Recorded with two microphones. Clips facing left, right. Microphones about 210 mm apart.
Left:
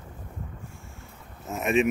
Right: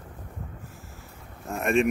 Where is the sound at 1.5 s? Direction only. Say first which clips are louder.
Even; centre (ahead or behind).